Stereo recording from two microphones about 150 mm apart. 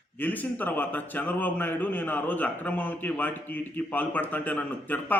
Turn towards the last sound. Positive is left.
turn(degrees=10)  # may be behind; listen again after turning